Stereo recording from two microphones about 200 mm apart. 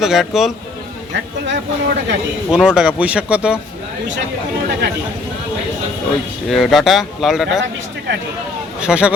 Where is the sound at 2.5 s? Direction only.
5° right (ahead or behind).